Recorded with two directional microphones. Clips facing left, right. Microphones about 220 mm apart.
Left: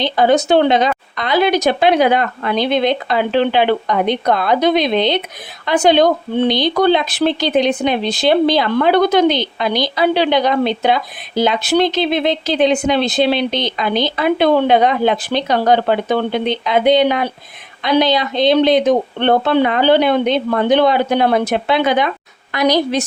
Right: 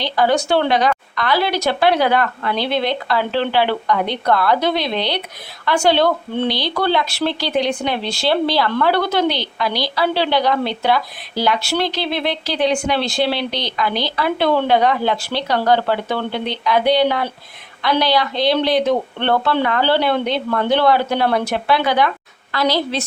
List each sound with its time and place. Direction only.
0.0 s a woman's voice: 20° left (ahead or behind)